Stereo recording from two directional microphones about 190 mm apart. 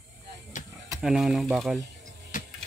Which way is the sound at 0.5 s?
40° left (ahead or behind).